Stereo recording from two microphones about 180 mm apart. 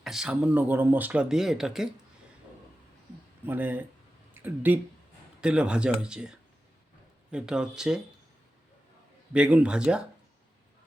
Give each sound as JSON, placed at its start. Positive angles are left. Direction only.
{"t": 0.0, "sound": "speech", "side_deg": 0}
{"t": 3.4, "sound": "speech", "side_deg": -10}
{"t": 9.3, "sound": "speech", "side_deg": -5}